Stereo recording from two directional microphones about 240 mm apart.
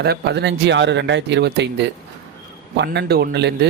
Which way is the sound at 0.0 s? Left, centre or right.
Right.